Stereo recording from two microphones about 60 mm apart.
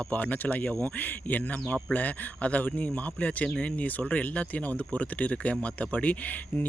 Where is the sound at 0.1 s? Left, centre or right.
Left.